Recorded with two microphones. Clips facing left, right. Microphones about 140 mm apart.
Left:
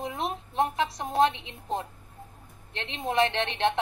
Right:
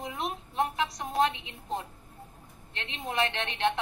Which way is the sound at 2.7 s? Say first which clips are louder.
Left 5 dB; 30° left (ahead or behind).